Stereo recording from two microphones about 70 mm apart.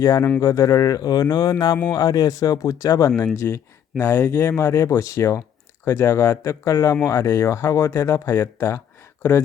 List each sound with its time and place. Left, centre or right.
0.0 s speech: left
1.9 s speech: left
3.3 s speech: left
5.8 s speech: left